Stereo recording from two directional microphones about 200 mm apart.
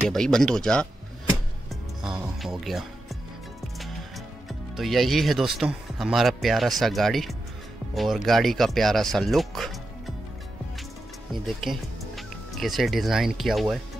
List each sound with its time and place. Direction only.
0.1 s speech: centre (ahead or behind)
1.7 s music: centre (ahead or behind)
4.5 s speech: centre (ahead or behind)
11.4 s speech: centre (ahead or behind)